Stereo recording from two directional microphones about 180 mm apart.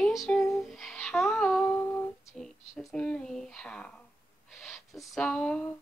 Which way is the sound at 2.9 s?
5° left (ahead or behind).